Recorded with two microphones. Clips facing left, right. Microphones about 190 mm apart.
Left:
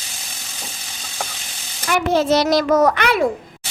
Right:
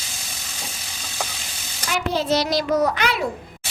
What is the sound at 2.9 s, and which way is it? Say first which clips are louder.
Speech: left 5 dB; 60° left (ahead or behind).